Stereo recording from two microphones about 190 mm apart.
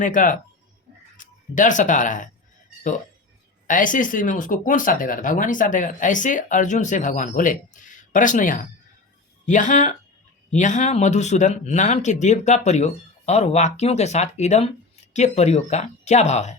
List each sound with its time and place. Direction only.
0.0 s speech: 45° left (ahead or behind)
3.7 s speech: 45° left (ahead or behind)